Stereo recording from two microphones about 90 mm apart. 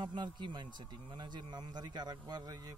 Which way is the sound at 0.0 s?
55° right (ahead or behind).